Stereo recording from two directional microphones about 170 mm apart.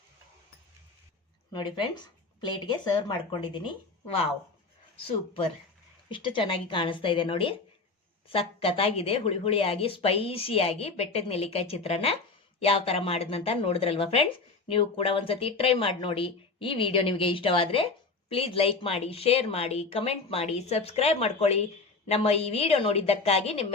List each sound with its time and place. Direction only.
1.5 s speech: 25° left (ahead or behind)